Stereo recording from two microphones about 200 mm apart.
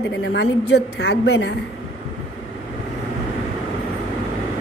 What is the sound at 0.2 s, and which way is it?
A woman's voice, 60° left (ahead or behind).